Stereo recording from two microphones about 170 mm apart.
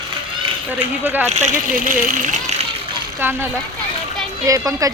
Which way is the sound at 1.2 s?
40° right (ahead or behind).